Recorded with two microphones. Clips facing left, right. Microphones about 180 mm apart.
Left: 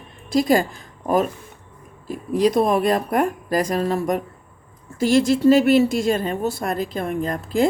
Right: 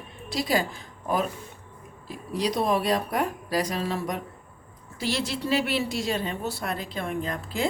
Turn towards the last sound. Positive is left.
turn(degrees=45)  # may be behind; listen again after turning